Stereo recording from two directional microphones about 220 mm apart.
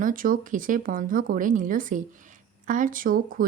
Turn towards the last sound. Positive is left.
turn(degrees=-40)  # may be behind; listen again after turning